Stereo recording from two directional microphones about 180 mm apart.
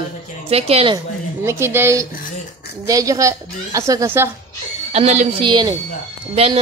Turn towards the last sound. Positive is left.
turn(degrees=-35)  # may be behind; listen again after turning